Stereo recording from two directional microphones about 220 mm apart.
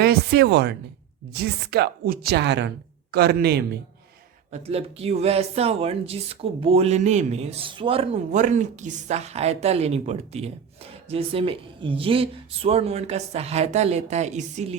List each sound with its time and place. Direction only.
0.0 s speech: 45° right (ahead or behind)
4.5 s speech: 25° right (ahead or behind)